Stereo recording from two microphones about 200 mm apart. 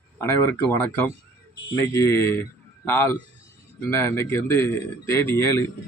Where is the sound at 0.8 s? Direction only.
10° left (ahead or behind).